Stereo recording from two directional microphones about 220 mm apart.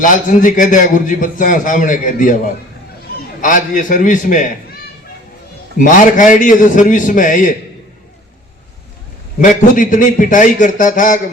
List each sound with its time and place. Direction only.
0.0 s a man's voice: 35° left (ahead or behind)
3.4 s a man's voice: 35° left (ahead or behind)
5.7 s a man's voice: 35° left (ahead or behind)
9.4 s a man's voice: 35° left (ahead or behind)